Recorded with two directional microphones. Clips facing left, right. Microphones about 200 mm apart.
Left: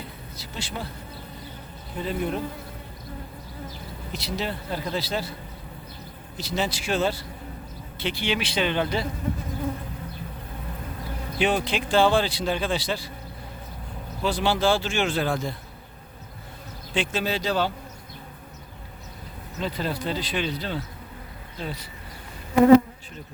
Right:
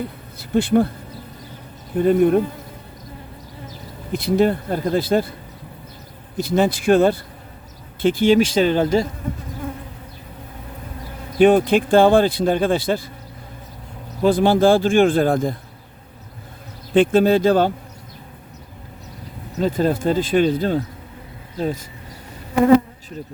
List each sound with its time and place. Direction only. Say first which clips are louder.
0.3 s speech: right 19 dB; 55° right (ahead or behind)
2.0 s speech: right 13 dB; 55° right (ahead or behind)
4.1 s speech: right 14 dB; 55° right (ahead or behind)
6.3 s speech: right 10 dB; 55° right (ahead or behind)
11.3 s speech: right 11 dB; 50° right (ahead or behind)
14.2 s speech: right 9 dB; 50° right (ahead or behind)
16.9 s speech: right 13 dB; 55° right (ahead or behind)
19.5 s speech: right 10 dB; 45° right (ahead or behind)